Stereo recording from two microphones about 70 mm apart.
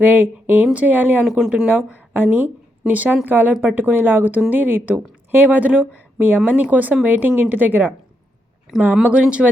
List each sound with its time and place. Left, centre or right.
0.0 s speech: right
1.4 s speech: centre
2.1 s speech: right
8.7 s speech: centre
9.0 s speech: centre